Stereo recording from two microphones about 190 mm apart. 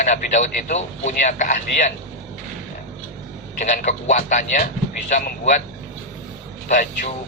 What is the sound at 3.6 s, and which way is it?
A man's voice, 40° left (ahead or behind).